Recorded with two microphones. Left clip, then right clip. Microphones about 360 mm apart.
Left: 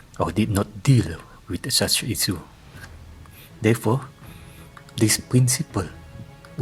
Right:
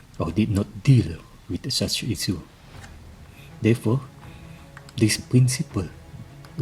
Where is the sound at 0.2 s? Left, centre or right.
Centre.